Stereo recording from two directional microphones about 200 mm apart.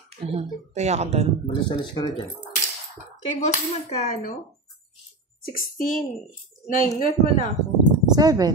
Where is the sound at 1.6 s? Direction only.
20° left (ahead or behind).